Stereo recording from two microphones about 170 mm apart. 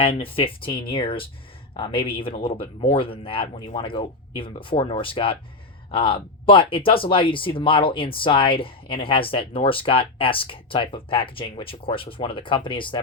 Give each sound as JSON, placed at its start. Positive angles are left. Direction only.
{"t": 0.0, "sound": "speech", "side_deg": 30}